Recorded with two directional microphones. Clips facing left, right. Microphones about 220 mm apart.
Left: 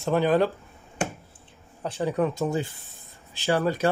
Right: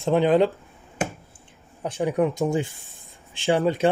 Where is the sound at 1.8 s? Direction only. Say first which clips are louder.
Right 3 dB; 15° right (ahead or behind).